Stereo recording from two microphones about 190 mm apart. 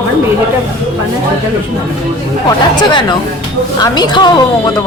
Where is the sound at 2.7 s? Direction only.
25° left (ahead or behind).